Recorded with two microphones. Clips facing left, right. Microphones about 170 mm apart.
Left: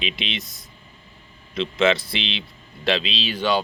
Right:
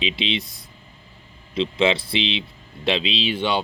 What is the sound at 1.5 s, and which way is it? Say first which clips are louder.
Speech: even; 25° right (ahead or behind).